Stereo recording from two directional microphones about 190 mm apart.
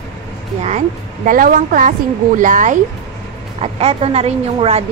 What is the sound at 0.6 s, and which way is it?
A woman's voice, 40° right (ahead or behind).